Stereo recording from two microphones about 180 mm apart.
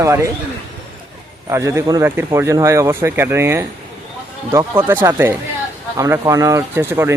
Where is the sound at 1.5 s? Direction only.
15° right (ahead or behind).